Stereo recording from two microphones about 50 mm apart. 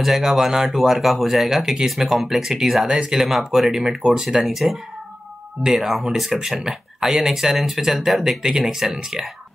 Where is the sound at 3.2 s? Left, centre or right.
Centre.